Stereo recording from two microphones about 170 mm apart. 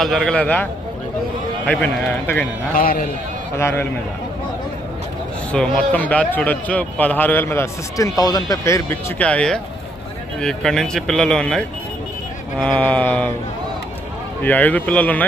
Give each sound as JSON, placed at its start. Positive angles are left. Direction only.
{"t": 0.0, "sound": "a man's voice", "side_deg": 5}
{"t": 2.7, "sound": "a man's voice", "side_deg": 55}
{"t": 3.5, "sound": "a man's voice", "side_deg": 15}
{"t": 5.5, "sound": "a man's voice", "side_deg": 5}
{"t": 14.4, "sound": "a man's voice", "side_deg": 10}